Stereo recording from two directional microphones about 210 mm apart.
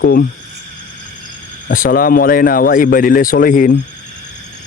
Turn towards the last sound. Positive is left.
turn(degrees=40)  # may be behind; listen again after turning